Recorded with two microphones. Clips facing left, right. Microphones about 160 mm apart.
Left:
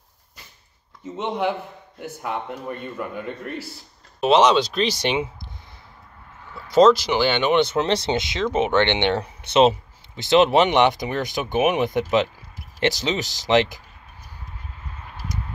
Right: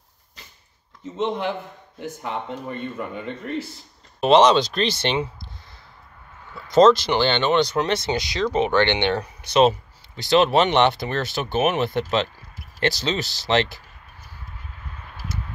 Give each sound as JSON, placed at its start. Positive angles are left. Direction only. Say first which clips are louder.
{"t": 1.1, "sound": "speech", "louder": "even", "side_deg": 10}
{"t": 4.2, "sound": "speech", "louder": "right 1 dB", "side_deg": 5}
{"t": 6.7, "sound": "speech", "louder": "even", "side_deg": 10}